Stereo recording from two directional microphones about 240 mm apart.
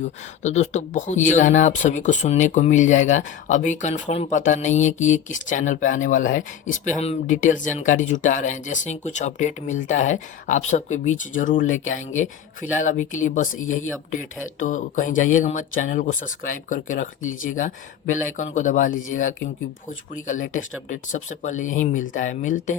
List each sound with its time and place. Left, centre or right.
0.0 s speech: left